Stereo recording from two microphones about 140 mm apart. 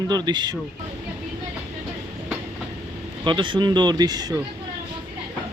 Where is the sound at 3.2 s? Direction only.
35° right (ahead or behind).